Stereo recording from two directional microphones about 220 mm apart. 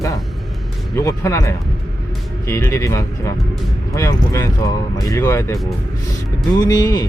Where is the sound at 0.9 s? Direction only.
15° left (ahead or behind).